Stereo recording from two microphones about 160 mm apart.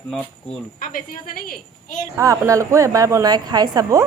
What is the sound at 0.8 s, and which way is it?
A woman's voice, 60° left (ahead or behind).